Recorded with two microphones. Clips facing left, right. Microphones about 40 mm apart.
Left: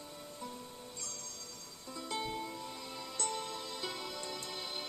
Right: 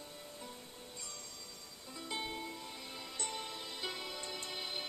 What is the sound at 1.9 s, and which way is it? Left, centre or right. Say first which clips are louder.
Music: left 3 dB; centre.